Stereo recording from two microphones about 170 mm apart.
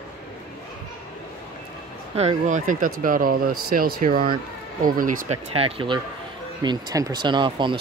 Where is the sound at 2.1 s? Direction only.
45° right (ahead or behind).